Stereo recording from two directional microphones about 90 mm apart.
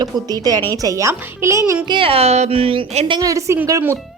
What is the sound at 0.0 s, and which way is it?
A woman's voice, 45° right (ahead or behind).